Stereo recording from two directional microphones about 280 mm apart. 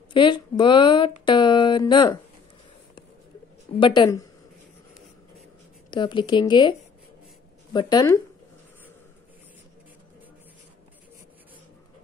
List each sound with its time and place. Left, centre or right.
0.1 s a woman's voice: centre
3.8 s a woman's voice: centre
5.9 s a woman's voice: centre
7.7 s a woman's voice: centre